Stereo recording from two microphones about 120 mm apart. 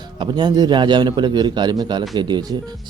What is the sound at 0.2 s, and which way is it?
A man's voice, 35° right (ahead or behind).